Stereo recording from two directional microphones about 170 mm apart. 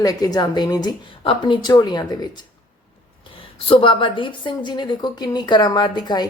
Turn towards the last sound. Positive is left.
turn(degrees=25)  # may be behind; listen again after turning